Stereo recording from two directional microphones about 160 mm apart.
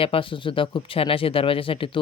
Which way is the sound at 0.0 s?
35° left (ahead or behind).